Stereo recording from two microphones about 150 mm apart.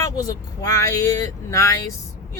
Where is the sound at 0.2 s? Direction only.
25° left (ahead or behind).